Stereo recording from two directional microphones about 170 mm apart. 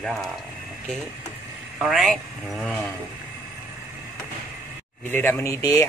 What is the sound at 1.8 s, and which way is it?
Speech, centre (ahead or behind).